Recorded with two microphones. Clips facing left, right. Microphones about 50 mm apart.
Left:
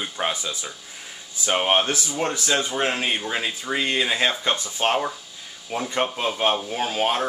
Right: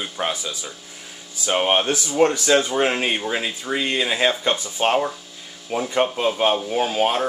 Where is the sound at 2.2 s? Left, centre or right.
Centre.